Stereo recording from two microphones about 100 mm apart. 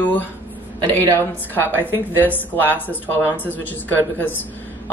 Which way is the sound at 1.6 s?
20° left (ahead or behind).